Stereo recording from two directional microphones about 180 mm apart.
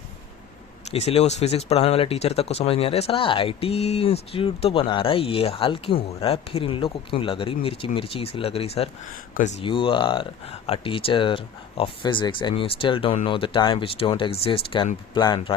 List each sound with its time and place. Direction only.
0.9 s speech: 35° left (ahead or behind)